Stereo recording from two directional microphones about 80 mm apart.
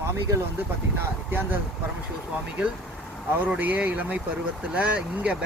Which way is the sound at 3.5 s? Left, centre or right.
Centre.